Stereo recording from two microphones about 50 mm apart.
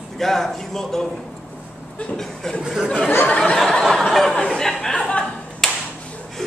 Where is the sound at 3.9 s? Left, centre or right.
Centre.